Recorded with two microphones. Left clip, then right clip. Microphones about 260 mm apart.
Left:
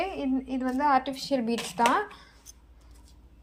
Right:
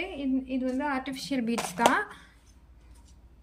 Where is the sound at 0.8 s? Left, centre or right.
Centre.